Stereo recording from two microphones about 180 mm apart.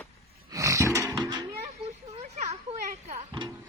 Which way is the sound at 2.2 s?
40° right (ahead or behind).